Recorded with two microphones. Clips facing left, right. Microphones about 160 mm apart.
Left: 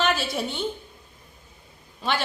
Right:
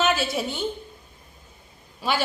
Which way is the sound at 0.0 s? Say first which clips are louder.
Right 2 dB; centre (ahead or behind).